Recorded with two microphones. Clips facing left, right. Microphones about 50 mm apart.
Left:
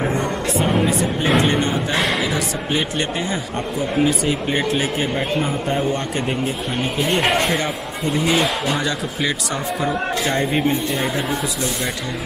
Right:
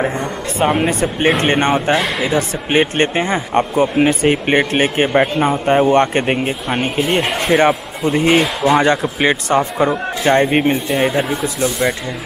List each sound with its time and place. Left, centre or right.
0.6 s speech: right
2.0 s speech: centre
2.2 s speech: right
7.1 s speech: centre
7.5 s speech: right
8.8 s speech: right
10.3 s speech: right